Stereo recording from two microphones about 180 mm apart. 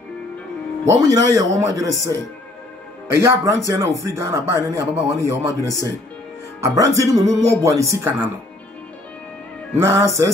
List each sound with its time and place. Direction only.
0.8 s speech: 20° right (ahead or behind)
3.1 s speech: 15° right (ahead or behind)
9.8 s speech: 15° right (ahead or behind)